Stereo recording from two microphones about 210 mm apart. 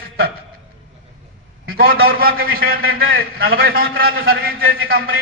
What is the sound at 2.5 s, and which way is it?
Speech, 45° right (ahead or behind).